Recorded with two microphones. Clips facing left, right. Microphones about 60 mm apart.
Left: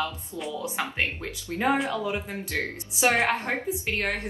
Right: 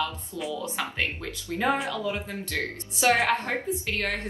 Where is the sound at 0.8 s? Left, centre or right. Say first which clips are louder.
Left 3 dB; left.